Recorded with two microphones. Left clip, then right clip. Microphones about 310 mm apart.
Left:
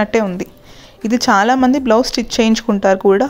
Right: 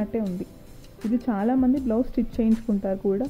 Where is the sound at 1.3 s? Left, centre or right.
Centre.